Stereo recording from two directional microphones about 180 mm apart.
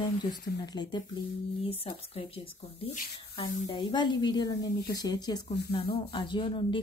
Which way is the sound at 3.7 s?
25° left (ahead or behind).